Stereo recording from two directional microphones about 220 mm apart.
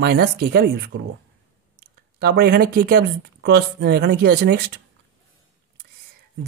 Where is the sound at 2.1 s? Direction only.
45° right (ahead or behind).